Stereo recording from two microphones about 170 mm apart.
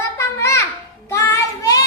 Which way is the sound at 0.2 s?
15° left (ahead or behind).